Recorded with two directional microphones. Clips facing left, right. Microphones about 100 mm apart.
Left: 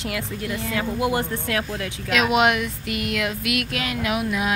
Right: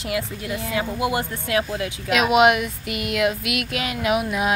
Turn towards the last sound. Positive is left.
turn(degrees=-20)  # may be behind; listen again after turning